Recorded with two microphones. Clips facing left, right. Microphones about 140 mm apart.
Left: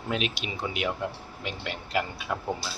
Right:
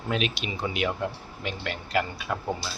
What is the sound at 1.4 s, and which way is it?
Speech, 10° left (ahead or behind).